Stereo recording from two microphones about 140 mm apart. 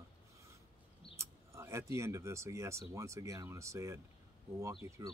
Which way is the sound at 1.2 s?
20° right (ahead or behind).